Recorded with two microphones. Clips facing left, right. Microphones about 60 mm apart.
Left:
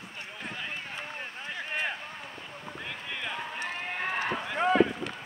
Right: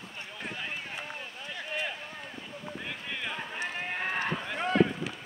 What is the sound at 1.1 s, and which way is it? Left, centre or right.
Boat, left.